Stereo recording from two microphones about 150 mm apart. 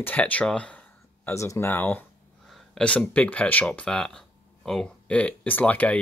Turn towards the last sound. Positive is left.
turn(degrees=10)  # may be behind; listen again after turning